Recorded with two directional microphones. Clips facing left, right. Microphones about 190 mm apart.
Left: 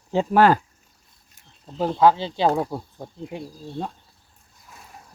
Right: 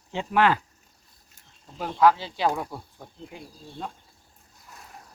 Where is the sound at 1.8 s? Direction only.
25° left (ahead or behind).